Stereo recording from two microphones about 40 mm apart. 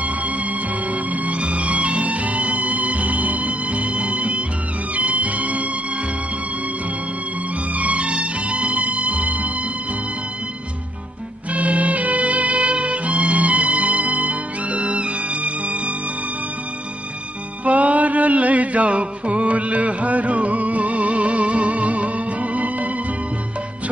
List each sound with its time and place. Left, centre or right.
0.0 s music: right
7.7 s music: right
11.5 s music: right
17.6 s music: right